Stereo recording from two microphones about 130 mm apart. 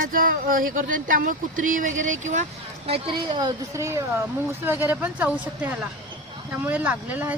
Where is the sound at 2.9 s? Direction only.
40° right (ahead or behind).